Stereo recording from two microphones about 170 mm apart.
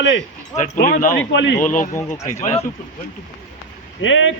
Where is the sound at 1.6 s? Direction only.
50° left (ahead or behind).